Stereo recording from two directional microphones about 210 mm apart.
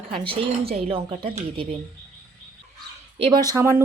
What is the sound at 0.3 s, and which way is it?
Speech, 25° right (ahead or behind).